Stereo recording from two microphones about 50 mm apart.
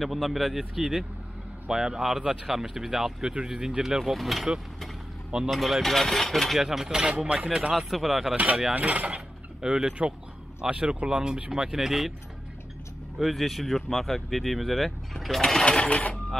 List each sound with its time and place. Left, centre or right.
0.0 s speech: centre
4.0 s speech: centre
5.5 s speech: centre
8.7 s speech: right
11.8 s speech: centre
13.2 s speech: centre; by 16.2 s left